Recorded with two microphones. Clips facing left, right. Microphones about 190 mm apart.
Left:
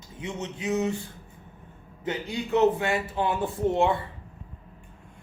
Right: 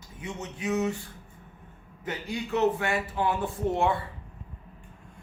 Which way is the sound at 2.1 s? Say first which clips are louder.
Left 4 dB; 20° left (ahead or behind).